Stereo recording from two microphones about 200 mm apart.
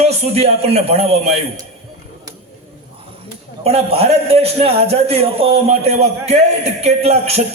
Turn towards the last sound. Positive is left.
turn(degrees=-30)  # may be behind; listen again after turning